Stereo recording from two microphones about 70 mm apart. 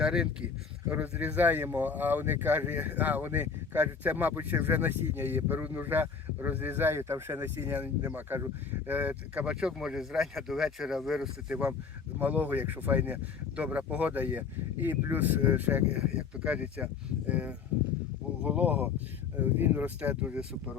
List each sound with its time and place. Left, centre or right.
0.0 s speech: centre
0.9 s speech: right
12.2 s speech: right
20.0 s speech: centre